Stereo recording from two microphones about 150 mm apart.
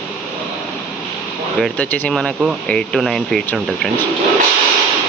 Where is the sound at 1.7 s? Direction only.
10° left (ahead or behind).